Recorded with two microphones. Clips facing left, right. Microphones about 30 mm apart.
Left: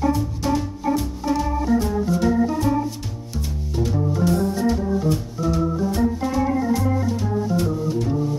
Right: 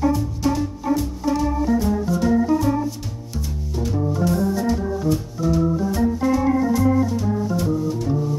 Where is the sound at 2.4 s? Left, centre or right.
Centre.